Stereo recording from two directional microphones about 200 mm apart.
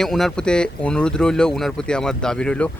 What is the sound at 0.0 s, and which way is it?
Speech, centre (ahead or behind).